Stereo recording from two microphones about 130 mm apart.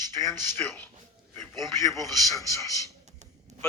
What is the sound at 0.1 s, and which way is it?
Speech, 20° left (ahead or behind).